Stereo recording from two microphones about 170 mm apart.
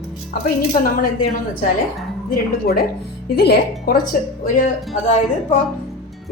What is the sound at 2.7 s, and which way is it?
A woman's voice, 65° left (ahead or behind).